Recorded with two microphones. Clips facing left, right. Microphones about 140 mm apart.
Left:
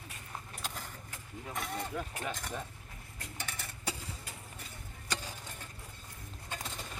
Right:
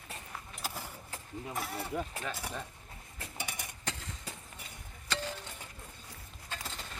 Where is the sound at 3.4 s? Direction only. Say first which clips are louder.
Right 2 dB; 15° right (ahead or behind).